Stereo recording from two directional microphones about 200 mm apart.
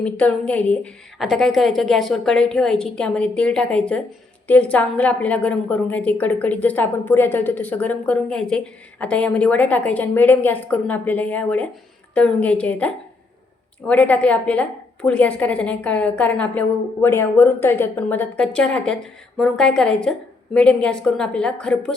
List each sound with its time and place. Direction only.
0.0 s a woman's voice: 5° left (ahead or behind)